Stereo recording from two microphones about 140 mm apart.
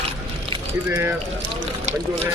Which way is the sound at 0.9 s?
15° right (ahead or behind).